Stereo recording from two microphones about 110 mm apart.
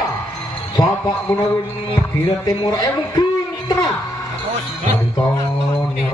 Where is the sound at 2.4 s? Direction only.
35° left (ahead or behind).